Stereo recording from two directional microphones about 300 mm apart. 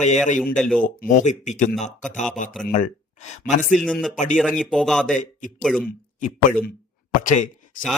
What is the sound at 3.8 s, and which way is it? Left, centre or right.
Speech, centre.